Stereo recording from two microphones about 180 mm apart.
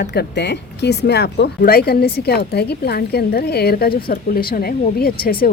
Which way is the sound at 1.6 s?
60° left (ahead or behind).